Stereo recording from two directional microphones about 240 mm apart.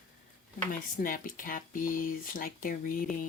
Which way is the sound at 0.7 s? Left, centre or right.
Left.